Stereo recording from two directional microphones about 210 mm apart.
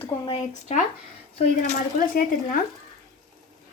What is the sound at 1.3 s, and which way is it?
Speech, 40° left (ahead or behind).